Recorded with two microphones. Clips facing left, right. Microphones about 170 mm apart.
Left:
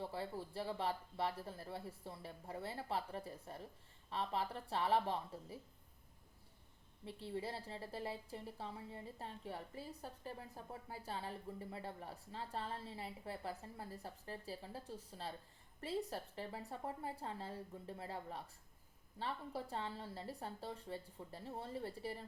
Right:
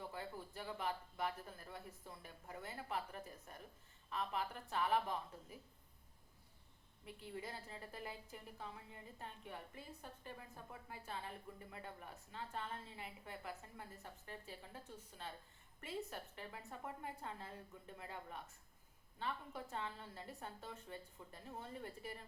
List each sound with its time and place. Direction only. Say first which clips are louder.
0.0 s a woman's voice: left 4 dB; 30° left (ahead or behind)
7.0 s a woman's voice: left 5 dB; 30° left (ahead or behind)